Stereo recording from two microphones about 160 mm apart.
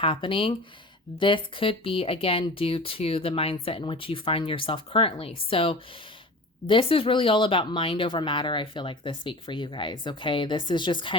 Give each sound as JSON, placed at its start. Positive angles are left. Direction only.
{"t": 0.0, "sound": "speech", "side_deg": 30}